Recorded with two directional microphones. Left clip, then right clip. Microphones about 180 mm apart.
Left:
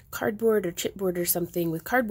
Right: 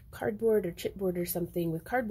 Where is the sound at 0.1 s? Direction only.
35° left (ahead or behind).